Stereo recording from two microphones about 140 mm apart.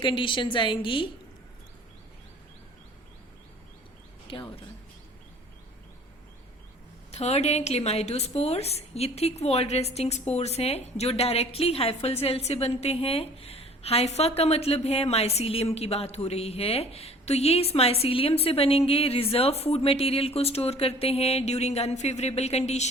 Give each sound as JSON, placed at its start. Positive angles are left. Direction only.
{"t": 0.0, "sound": "a woman's voice", "side_deg": 35}
{"t": 4.3, "sound": "speech", "side_deg": 40}
{"t": 7.1, "sound": "a woman's voice", "side_deg": 50}